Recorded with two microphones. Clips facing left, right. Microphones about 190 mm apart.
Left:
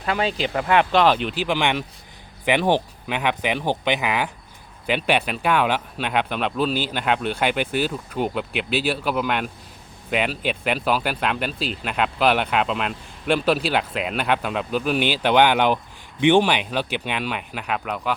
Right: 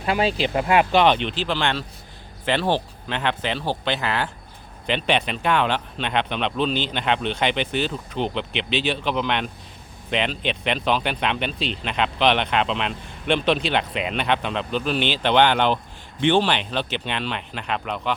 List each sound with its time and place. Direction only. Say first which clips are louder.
0.2 s speech: right 2 dB; 35° right (ahead or behind)
0.5 s speech: even; 10° right (ahead or behind); by 18.1 s 5° left (ahead or behind)